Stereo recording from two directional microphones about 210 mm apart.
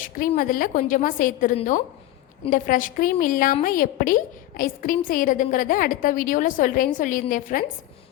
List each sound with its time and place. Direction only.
0.0 s a woman's voice: 40° left (ahead or behind)